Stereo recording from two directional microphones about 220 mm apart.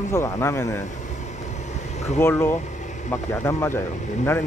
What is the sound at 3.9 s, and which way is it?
Speech, 35° left (ahead or behind).